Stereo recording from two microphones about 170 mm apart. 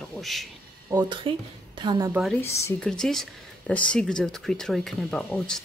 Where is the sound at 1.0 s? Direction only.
30° right (ahead or behind).